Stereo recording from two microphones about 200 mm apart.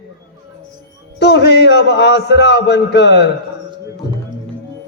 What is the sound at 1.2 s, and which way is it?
A man's voice, 60° left (ahead or behind).